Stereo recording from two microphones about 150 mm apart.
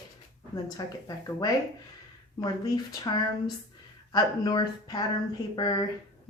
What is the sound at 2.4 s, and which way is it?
Speech, 25° left (ahead or behind).